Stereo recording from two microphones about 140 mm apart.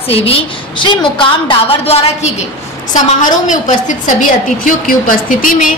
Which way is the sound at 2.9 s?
65° left (ahead or behind).